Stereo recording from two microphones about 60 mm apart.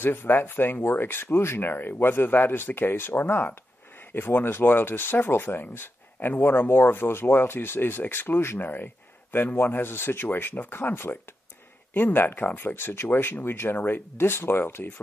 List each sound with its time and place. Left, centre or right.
0.0 s speech: left